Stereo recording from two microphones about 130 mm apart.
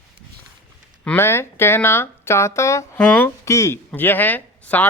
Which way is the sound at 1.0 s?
15° left (ahead or behind).